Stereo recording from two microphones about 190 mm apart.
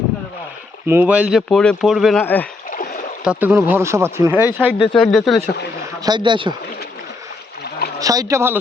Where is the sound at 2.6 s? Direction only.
45° left (ahead or behind).